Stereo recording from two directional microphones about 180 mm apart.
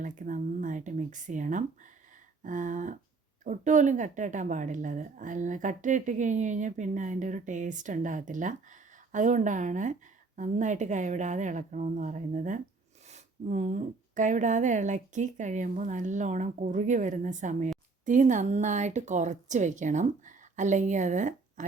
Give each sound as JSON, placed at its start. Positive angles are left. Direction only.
{"t": 0.0, "sound": "a woman's voice", "side_deg": -45}